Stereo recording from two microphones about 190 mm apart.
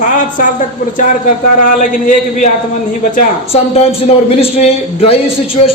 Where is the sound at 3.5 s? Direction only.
35° left (ahead or behind).